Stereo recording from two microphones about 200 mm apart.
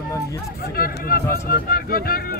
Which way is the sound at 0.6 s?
50° left (ahead or behind).